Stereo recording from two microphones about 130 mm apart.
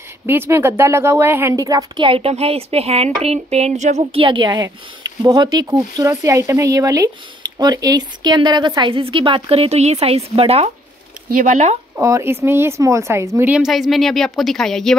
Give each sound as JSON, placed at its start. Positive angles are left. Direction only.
{"t": 0.3, "sound": "a woman's voice", "side_deg": -15}
{"t": 2.0, "sound": "a woman's voice", "side_deg": -50}
{"t": 4.2, "sound": "speech", "side_deg": -35}
{"t": 11.3, "sound": "speech", "side_deg": -70}
{"t": 12.0, "sound": "a woman's voice", "side_deg": -20}
{"t": 13.5, "sound": "speech", "side_deg": 0}